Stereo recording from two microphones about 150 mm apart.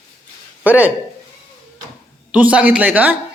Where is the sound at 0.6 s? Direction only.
10° right (ahead or behind).